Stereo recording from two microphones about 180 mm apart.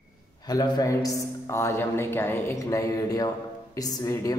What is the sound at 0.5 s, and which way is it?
Speech, 20° left (ahead or behind).